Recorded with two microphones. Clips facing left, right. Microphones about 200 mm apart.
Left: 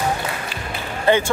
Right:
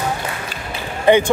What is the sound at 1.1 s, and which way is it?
Speech, 20° right (ahead or behind).